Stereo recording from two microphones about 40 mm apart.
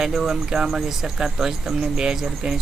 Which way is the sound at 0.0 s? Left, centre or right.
Centre.